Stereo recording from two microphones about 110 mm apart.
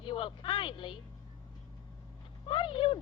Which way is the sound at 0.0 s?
50° left (ahead or behind).